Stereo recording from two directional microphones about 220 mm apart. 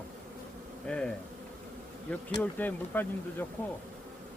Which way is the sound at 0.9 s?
5° left (ahead or behind).